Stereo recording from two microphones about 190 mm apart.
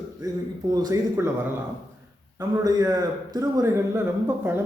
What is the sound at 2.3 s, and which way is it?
A man's voice, 20° right (ahead or behind).